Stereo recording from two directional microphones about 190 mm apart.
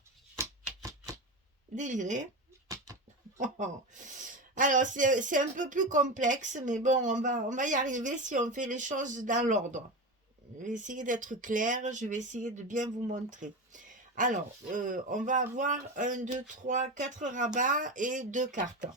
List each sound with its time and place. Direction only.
0.3 s a sound: 15° right (ahead or behind)
1.7 s speech: 40° right (ahead or behind)
3.3 s speech: 40° right (ahead or behind)